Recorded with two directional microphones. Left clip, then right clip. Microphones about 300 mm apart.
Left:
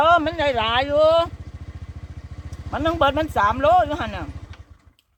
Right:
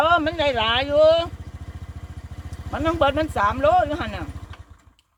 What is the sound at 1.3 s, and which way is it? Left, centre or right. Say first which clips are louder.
Motorcycle: right 1 dB; right.